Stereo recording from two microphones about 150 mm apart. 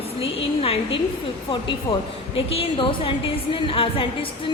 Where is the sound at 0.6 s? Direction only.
40° left (ahead or behind).